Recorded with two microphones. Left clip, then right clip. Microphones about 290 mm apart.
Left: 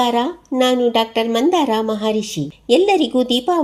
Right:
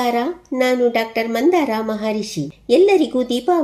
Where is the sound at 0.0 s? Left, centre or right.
Left.